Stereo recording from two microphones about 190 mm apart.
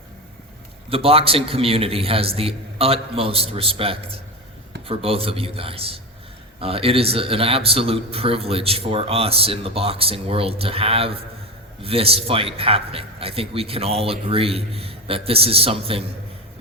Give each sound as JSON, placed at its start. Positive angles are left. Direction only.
{"t": 0.9, "sound": "a man's voice", "side_deg": -30}